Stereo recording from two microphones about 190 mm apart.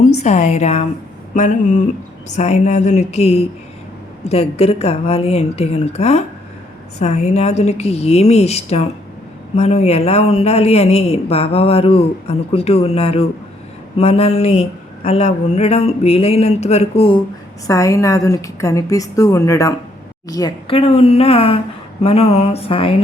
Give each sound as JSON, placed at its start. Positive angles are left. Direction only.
{"t": 0.0, "sound": "speech", "side_deg": 40}
{"t": 1.3, "sound": "a sound", "side_deg": 40}
{"t": 2.3, "sound": "speech", "side_deg": 35}
{"t": 17.7, "sound": "a woman's voice", "side_deg": 15}